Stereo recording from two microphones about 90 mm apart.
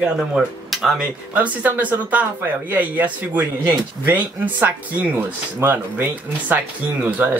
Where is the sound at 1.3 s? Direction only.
20° right (ahead or behind).